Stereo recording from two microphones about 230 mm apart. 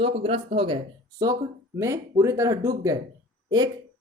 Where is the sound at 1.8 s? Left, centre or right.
Centre.